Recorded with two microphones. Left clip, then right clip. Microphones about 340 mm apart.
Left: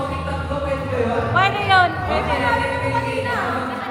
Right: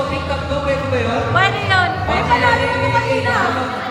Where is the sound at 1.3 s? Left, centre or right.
Centre.